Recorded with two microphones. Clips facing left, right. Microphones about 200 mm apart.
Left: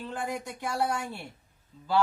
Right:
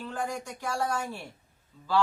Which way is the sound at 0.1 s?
20° left (ahead or behind).